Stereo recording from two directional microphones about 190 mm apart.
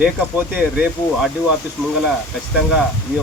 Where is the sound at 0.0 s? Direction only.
10° right (ahead or behind).